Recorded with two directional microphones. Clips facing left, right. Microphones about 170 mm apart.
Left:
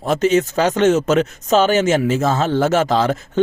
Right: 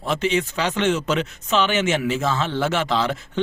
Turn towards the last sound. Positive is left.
turn(degrees=45)  # may be behind; listen again after turning